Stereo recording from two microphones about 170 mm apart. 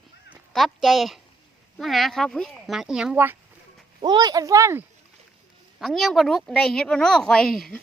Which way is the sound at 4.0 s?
25° right (ahead or behind).